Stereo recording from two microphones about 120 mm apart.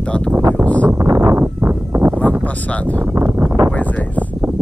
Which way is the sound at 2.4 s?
10° left (ahead or behind).